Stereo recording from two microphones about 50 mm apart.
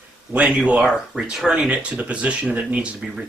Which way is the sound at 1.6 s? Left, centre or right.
Right.